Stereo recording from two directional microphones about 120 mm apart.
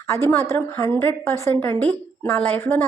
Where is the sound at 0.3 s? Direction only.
20° left (ahead or behind).